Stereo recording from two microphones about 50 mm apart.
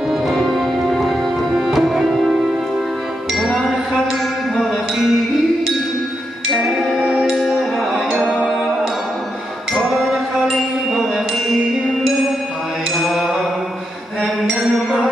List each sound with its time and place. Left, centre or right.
0.1 s music: centre
3.3 s music: centre
6.5 s music: centre
6.9 s music: centre
7.2 s music: centre
9.8 s music: centre
13.0 s mantra: centre
14.2 s music: centre